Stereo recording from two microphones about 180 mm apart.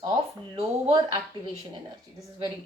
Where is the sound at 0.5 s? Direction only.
30° right (ahead or behind).